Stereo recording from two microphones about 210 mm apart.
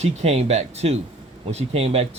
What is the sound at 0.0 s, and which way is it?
Speech, 30° right (ahead or behind).